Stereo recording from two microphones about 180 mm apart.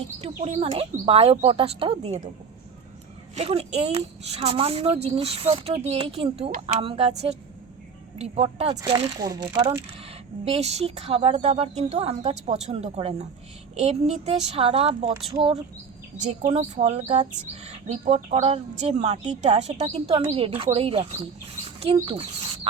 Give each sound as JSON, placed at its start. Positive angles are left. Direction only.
{"t": 0.2, "sound": "a woman's voice", "side_deg": -35}
{"t": 3.3, "sound": "a woman's voice", "side_deg": -35}
{"t": 8.7, "sound": "speech", "side_deg": -20}
{"t": 10.4, "sound": "a woman's voice", "side_deg": -35}